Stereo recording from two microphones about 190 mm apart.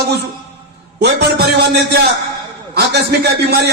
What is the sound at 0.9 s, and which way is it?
A man's voice, 60° right (ahead or behind).